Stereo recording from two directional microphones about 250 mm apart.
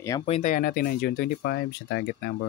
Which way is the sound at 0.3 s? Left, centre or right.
Left.